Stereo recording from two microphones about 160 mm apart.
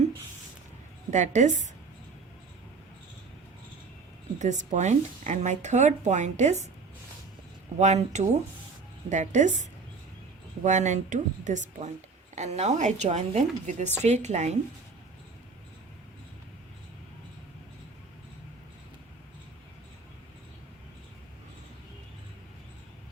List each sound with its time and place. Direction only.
1.1 s speech: 50° right (ahead or behind)
4.4 s speech: 50° right (ahead or behind)
7.8 s speech: 45° right (ahead or behind)